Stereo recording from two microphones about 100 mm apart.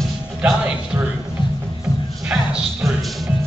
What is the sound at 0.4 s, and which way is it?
Speech, 15° right (ahead or behind).